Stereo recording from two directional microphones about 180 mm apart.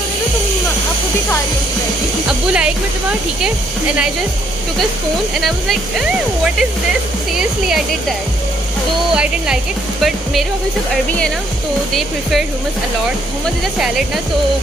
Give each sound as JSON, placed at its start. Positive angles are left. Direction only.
{"t": 2.2, "sound": "speech", "side_deg": -5}
{"t": 5.4, "sound": "speech", "side_deg": 0}
{"t": 9.1, "sound": "speech", "side_deg": -5}
{"t": 11.9, "sound": "speech", "side_deg": 0}